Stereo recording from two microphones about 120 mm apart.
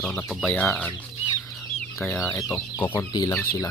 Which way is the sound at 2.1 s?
25° left (ahead or behind).